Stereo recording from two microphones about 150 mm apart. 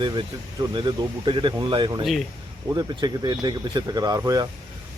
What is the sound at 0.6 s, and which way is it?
Speech, 30° right (ahead or behind).